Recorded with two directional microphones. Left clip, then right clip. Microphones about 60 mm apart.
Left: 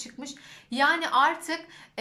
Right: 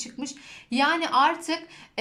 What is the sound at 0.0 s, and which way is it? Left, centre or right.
A woman's voice, centre.